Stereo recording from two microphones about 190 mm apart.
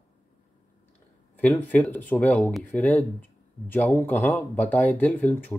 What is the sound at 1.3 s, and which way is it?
Speech, 10° left (ahead or behind).